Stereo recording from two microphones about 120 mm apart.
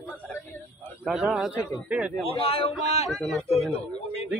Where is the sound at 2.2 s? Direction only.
50° left (ahead or behind).